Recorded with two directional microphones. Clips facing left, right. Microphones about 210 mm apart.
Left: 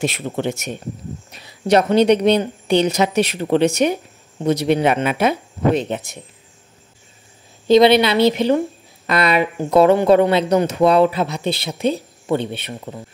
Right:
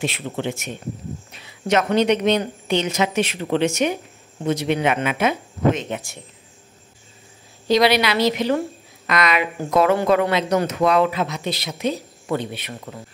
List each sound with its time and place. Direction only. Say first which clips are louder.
0.0 s a woman's voice: left 4 dB; 45° left (ahead or behind)
5.9 s a man's voice: left 3 dB; 20° left (ahead or behind)
7.6 s a man's voice: left 6 dB; 25° left (ahead or behind)